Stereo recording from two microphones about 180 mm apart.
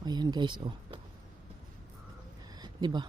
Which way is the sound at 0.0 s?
20° right (ahead or behind).